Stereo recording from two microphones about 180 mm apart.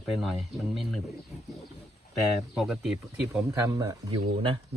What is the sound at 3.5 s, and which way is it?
Speech, 20° right (ahead or behind).